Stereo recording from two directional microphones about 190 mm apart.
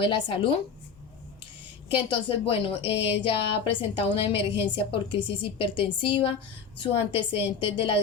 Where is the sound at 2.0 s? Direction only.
30° left (ahead or behind).